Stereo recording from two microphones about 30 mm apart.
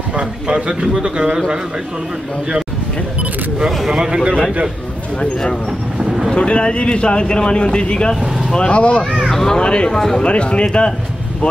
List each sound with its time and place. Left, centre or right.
0.1 s a man's voice: right
3.5 s speech: right
5.9 s vehicle: right
6.3 s speech: left
9.3 s speech: centre
9.6 s speech: left